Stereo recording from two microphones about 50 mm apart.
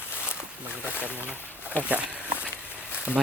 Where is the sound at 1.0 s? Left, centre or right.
Right.